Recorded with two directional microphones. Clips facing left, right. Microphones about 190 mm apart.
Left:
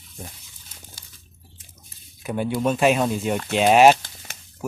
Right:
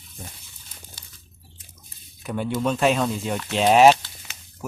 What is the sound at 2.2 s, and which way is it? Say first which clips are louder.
Speech: left 2 dB; 5° left (ahead or behind).